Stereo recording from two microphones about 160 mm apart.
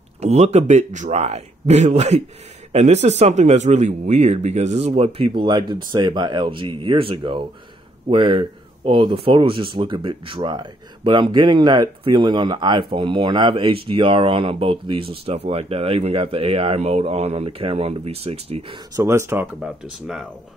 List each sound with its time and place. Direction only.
0.2 s speech: 45° right (ahead or behind)
18.9 s speech: 15° right (ahead or behind)
19.6 s speech: 5° right (ahead or behind)